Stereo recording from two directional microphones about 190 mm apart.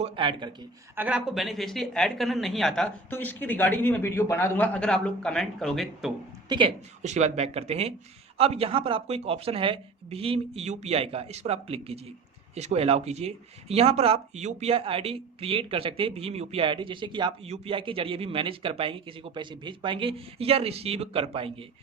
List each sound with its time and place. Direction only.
0.0 s speech: 25° right (ahead or behind)
0.9 s a woman's voice: 5° right (ahead or behind)
7.0 s speech: 40° right (ahead or behind)